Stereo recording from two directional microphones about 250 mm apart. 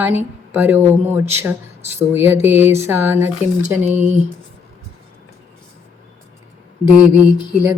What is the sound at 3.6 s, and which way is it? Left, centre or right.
Speech, right.